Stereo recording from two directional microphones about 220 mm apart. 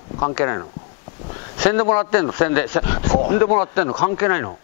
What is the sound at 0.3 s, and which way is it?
A man's voice, 15° left (ahead or behind).